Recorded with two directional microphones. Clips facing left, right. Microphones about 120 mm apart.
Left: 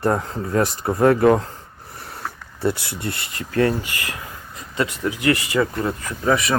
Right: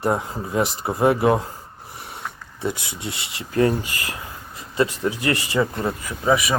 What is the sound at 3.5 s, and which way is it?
Speech, 25° right (ahead or behind).